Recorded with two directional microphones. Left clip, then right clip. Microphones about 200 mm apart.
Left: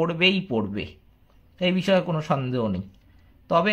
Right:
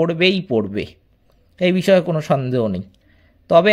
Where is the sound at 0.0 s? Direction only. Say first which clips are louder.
Right 5 dB; 30° right (ahead or behind).